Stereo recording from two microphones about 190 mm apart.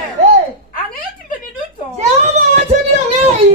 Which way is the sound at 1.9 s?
35° right (ahead or behind).